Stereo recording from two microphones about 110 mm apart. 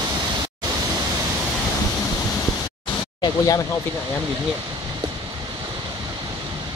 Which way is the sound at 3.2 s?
35° left (ahead or behind).